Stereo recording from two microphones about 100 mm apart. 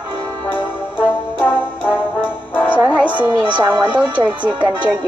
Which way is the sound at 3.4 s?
50° right (ahead or behind).